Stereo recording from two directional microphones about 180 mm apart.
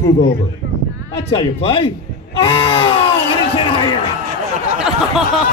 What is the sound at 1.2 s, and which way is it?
Speech, 30° left (ahead or behind).